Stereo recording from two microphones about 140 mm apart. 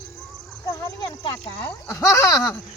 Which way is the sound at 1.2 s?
40° left (ahead or behind).